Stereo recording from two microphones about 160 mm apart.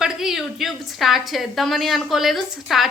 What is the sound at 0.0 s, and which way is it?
A woman's voice, centre (ahead or behind).